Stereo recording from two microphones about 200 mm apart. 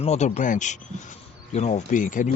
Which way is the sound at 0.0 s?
35° left (ahead or behind).